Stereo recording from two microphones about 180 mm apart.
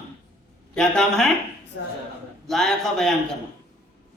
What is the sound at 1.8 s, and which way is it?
Speech, 65° left (ahead or behind).